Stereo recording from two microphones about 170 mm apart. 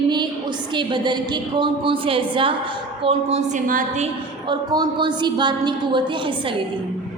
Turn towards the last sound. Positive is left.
turn(degrees=-30)  # may be behind; listen again after turning